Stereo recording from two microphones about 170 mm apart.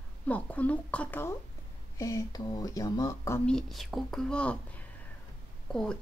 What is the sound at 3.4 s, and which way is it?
Speech, 5° left (ahead or behind).